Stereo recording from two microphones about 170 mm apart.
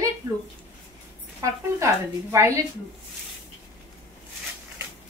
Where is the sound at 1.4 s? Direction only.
15° right (ahead or behind).